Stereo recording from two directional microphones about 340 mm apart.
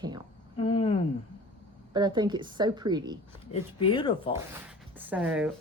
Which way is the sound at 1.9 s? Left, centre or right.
Centre.